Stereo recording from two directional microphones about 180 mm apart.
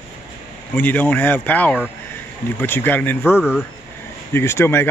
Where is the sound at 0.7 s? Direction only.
10° left (ahead or behind).